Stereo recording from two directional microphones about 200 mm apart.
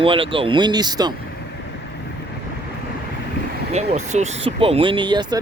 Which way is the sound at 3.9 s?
35° right (ahead or behind).